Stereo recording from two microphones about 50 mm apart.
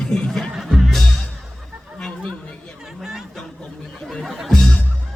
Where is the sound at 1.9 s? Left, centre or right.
Centre.